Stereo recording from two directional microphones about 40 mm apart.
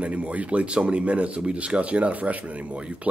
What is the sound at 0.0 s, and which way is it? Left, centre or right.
Speech, right.